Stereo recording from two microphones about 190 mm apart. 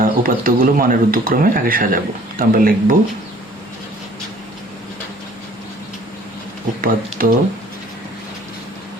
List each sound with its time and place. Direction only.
0.0 s speech: 45° right (ahead or behind)
6.8 s speech: 50° right (ahead or behind)